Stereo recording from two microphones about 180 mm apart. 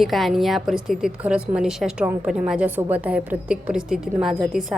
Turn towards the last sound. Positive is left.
turn(degrees=0)  # may be behind; listen again after turning